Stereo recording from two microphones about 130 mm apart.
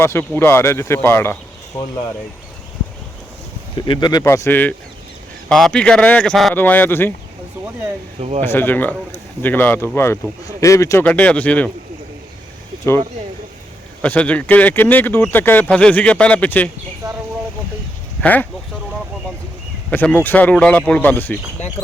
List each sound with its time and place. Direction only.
0.0 s speech: 20° left (ahead or behind)
3.8 s speech: 35° left (ahead or behind)
4.2 s speech: 20° left (ahead or behind)
5.5 s speech: 5° left (ahead or behind)
8.4 s speech: 15° left (ahead or behind)
11.0 s speech: 10° left (ahead or behind)
12.8 s speech: 20° left (ahead or behind)
14.0 s speech: 10° left (ahead or behind)
17.0 s bird: 30° right (ahead or behind)
18.2 s speech: 10° left (ahead or behind)
19.9 s speech: 15° left (ahead or behind)